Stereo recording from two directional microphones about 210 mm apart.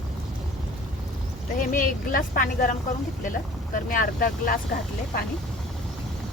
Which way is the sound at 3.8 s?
40° left (ahead or behind).